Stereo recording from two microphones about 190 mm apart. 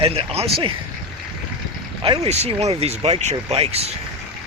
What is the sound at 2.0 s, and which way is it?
Speech, 30° right (ahead or behind).